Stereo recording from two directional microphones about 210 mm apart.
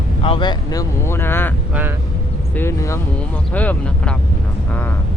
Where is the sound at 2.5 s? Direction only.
10° left (ahead or behind).